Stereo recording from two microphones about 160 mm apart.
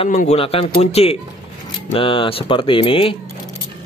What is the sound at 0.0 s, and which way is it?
A man's voice, 40° left (ahead or behind).